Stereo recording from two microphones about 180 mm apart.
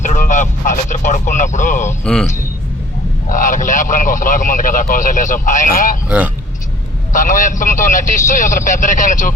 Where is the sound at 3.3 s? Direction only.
45° left (ahead or behind).